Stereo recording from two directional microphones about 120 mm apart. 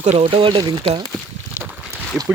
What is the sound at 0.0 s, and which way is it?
Speech, 70° right (ahead or behind).